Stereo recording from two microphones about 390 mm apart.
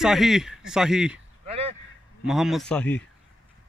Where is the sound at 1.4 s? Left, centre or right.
Centre.